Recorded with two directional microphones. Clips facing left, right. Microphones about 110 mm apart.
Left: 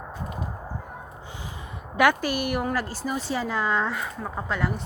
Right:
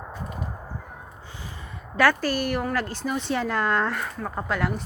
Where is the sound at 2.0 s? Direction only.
15° left (ahead or behind).